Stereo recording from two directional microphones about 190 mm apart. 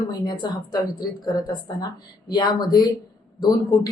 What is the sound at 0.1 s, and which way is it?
Speech, 20° left (ahead or behind).